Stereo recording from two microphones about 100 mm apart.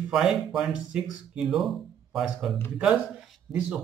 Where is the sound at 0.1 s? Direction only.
5° right (ahead or behind).